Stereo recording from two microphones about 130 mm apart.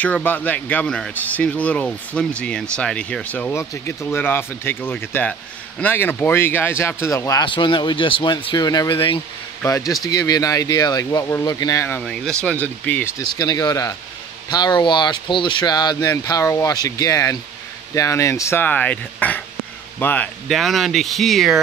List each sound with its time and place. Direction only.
0.0 s speech: 10° left (ahead or behind)
7.4 s speech: 40° left (ahead or behind)
9.7 s speech: 25° left (ahead or behind)
12.0 s speech: 5° left (ahead or behind)
13.4 s speech: 30° left (ahead or behind)
20.4 s speech: centre (ahead or behind)